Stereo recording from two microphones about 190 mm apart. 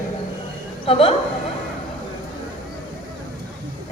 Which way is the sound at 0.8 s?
30° left (ahead or behind).